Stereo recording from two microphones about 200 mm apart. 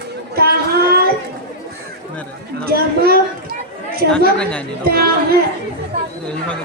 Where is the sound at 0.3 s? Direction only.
50° right (ahead or behind).